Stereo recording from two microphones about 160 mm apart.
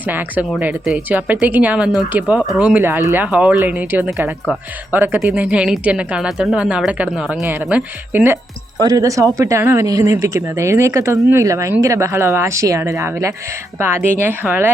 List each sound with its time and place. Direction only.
0.0 s speech: 10° right (ahead or behind)